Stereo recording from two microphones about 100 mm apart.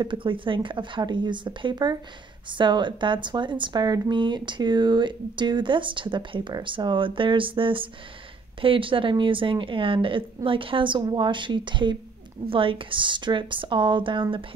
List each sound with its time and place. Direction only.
0.0 s a woman's voice: 55° right (ahead or behind)